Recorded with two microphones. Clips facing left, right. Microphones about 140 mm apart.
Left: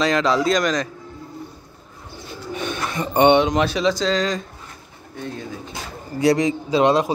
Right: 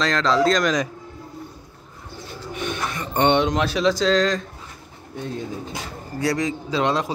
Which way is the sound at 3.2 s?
5° left (ahead or behind).